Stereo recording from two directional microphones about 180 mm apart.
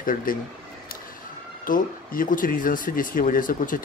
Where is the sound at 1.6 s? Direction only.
50° left (ahead or behind).